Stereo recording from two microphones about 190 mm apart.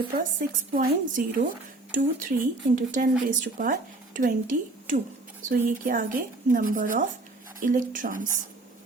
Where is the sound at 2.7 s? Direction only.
45° right (ahead or behind).